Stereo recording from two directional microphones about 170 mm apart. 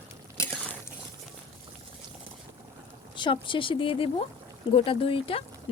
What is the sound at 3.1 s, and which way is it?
Speech, 30° left (ahead or behind).